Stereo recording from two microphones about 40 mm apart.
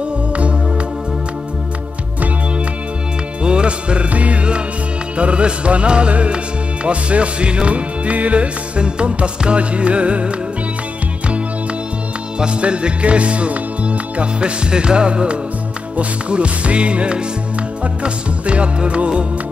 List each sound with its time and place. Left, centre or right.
3.4 s music: right
12.4 s music: right